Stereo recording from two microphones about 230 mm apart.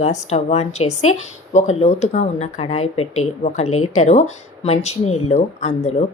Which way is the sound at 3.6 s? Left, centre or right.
Left.